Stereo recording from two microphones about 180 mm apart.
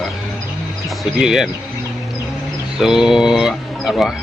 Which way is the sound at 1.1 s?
Centre (ahead or behind).